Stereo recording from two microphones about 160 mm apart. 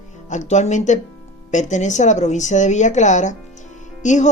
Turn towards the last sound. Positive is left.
turn(degrees=50)  # may be behind; listen again after turning